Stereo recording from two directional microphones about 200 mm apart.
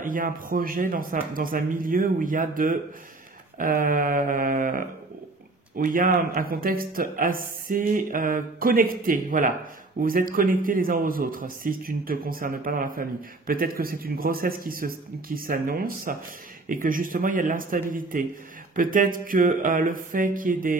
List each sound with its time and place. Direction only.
0.0 s speech: 45° right (ahead or behind)